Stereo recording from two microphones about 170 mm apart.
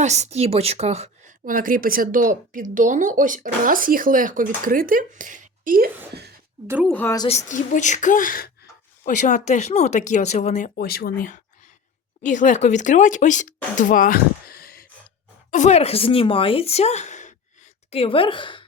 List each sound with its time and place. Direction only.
0.0 s a woman's voice: 40° right (ahead or behind)
1.5 s speech: 55° right (ahead or behind)
6.8 s speech: 10° left (ahead or behind)
7.3 s speech: 45° left (ahead or behind)
10.8 s speech: 65° left (ahead or behind)
12.2 s speech: 45° left (ahead or behind)
15.4 s speech: 45° left (ahead or behind); by 18.6 s 30° left (ahead or behind)